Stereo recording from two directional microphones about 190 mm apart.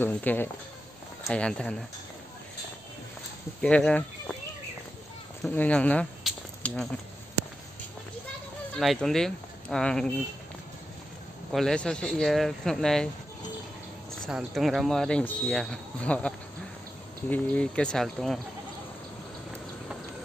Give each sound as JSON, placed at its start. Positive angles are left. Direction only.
{"t": 0.0, "sound": "speech", "side_deg": 10}
{"t": 3.6, "sound": "speech", "side_deg": 5}
{"t": 5.4, "sound": "speech", "side_deg": 5}
{"t": 8.7, "sound": "speech", "side_deg": 0}
{"t": 11.5, "sound": "speech", "side_deg": 5}
{"t": 14.2, "sound": "speech", "side_deg": 0}